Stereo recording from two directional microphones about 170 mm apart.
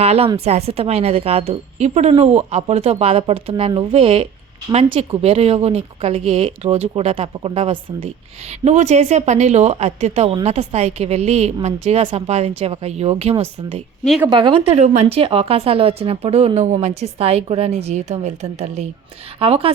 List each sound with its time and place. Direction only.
0.0 s speech: 35° right (ahead or behind)